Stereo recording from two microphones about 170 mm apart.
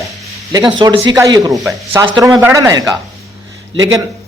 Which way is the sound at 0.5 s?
25° right (ahead or behind).